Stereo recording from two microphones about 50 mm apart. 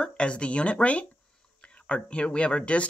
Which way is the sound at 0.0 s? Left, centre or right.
Left.